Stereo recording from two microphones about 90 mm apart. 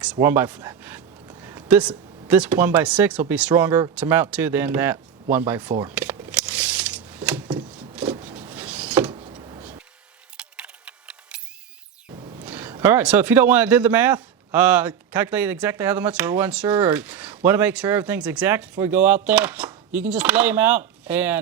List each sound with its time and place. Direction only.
0.2 s a man's voice: 25° right (ahead or behind)
1.4 s a sound: 40° right (ahead or behind)
1.6 s speech: 15° right (ahead or behind)
3.5 s a man's voice: 30° right (ahead or behind)
5.9 s a sound: 15° right (ahead or behind)
8.2 s vehicle: 25° right (ahead or behind)
9.1 s vehicle: 70° right (ahead or behind)
10.3 s keys jangling: 10° right (ahead or behind)
12.5 s a sound: 20° right (ahead or behind)
13.0 s a man's voice: 15° right (ahead or behind)